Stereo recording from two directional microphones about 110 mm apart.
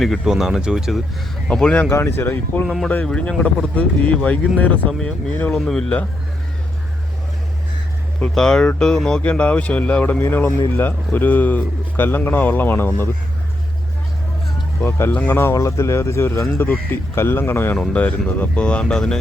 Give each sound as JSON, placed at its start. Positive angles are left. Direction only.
{"t": 0.0, "sound": "speech", "side_deg": 0}
{"t": 1.5, "sound": "speech", "side_deg": 5}
{"t": 1.9, "sound": "a man's voice", "side_deg": 20}
{"t": 2.6, "sound": "speech", "side_deg": 0}
{"t": 2.9, "sound": "speech", "side_deg": 10}
{"t": 8.2, "sound": "speech", "side_deg": 5}
{"t": 14.8, "sound": "a man's voice", "side_deg": 20}